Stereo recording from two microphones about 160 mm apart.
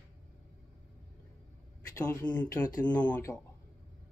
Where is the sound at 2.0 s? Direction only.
10° left (ahead or behind).